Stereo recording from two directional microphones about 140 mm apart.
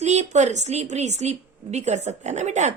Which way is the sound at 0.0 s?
55° right (ahead or behind).